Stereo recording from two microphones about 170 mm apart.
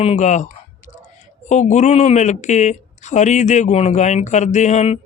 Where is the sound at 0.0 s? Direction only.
40° left (ahead or behind).